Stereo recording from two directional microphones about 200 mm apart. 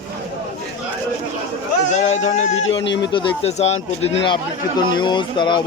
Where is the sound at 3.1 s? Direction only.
30° left (ahead or behind).